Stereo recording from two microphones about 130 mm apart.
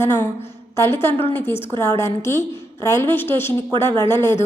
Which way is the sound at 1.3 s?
15° left (ahead or behind).